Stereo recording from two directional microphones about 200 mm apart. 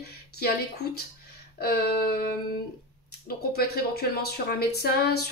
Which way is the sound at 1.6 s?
50° left (ahead or behind).